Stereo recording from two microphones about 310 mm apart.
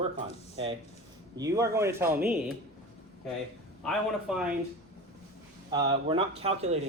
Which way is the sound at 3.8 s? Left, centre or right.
Centre.